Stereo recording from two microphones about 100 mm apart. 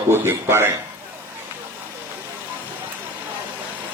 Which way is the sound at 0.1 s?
25° right (ahead or behind).